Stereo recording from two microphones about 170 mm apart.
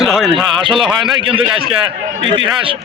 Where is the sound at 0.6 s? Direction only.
30° right (ahead or behind).